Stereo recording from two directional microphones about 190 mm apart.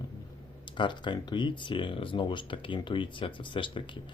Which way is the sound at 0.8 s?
25° left (ahead or behind).